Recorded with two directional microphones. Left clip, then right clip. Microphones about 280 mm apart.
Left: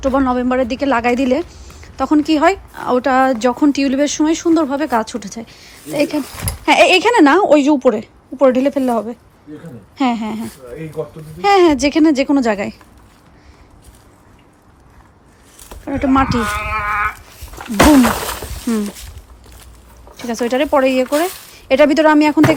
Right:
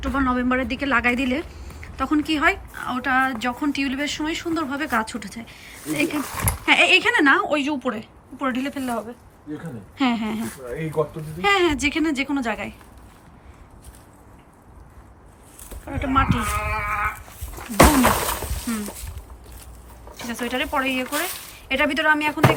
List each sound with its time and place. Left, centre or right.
0.0 s a woman's voice: centre
6.3 s a woman's voice: centre
10.0 s a woman's voice: centre
16.0 s a woman's voice: centre
17.6 s wild animals: centre
20.1 s a woman's voice: centre